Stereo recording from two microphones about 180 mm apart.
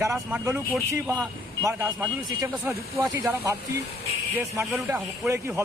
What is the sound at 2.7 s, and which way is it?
Speech, 10° right (ahead or behind).